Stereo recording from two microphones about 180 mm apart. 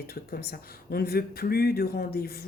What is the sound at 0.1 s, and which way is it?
A woman's voice, 60° left (ahead or behind).